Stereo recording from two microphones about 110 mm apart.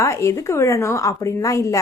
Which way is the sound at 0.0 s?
25° left (ahead or behind).